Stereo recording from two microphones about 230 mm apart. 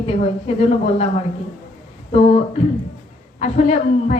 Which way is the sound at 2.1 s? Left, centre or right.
Left.